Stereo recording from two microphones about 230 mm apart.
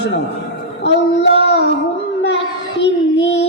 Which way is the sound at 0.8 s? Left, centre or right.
Left.